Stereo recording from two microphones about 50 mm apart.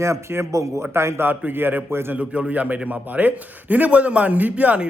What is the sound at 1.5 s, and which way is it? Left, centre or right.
Speech, right.